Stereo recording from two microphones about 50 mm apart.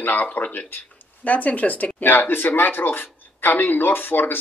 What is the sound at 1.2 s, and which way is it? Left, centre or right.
Speech, left.